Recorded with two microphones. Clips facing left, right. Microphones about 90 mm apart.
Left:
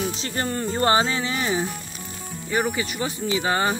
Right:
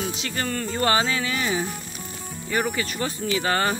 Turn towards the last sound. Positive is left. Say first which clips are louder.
# left 1 dB
turn(degrees=10)  # may be behind; listen again after turning